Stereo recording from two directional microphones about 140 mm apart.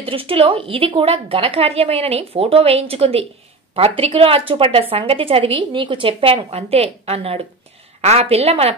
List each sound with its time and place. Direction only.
0.0 s a woman's voice: 40° right (ahead or behind)